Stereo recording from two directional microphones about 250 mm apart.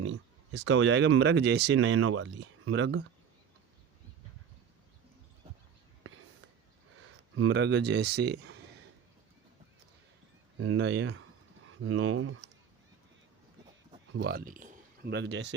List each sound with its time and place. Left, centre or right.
0.0 s speech: right
7.0 s speech: right
10.6 s speech: right
11.9 s speech: right
14.3 s a sound: right
15.1 s speech: right